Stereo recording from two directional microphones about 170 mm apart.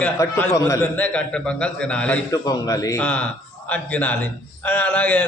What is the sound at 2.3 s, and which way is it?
Speech, 20° left (ahead or behind).